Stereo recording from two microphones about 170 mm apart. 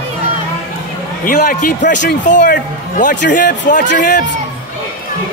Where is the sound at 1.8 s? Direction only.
90° left.